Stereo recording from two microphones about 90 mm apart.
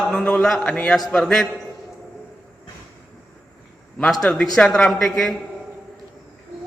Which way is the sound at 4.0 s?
10° left (ahead or behind).